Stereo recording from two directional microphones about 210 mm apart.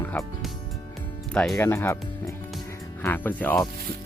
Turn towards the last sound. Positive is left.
turn(degrees=10)  # may be behind; listen again after turning